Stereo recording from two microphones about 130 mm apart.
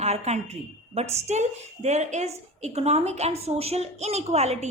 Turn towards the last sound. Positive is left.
turn(degrees=-55)  # may be behind; listen again after turning